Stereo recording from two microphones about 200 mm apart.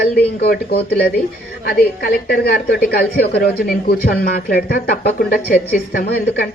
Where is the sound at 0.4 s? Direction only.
50° left (ahead or behind).